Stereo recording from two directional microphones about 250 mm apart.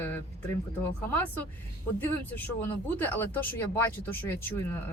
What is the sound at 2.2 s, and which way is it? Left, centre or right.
Speech, centre.